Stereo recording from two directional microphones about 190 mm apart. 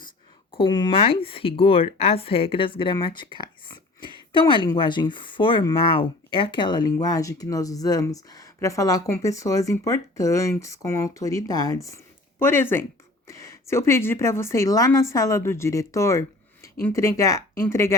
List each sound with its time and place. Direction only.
0.5 s a woman's voice: 25° left (ahead or behind)